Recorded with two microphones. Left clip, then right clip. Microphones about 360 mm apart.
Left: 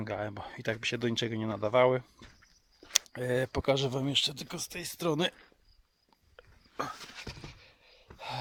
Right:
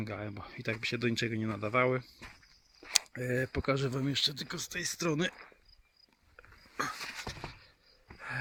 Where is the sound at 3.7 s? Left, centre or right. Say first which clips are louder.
Left 5 dB; centre.